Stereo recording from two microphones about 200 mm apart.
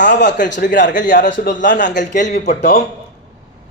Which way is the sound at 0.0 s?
60° left (ahead or behind).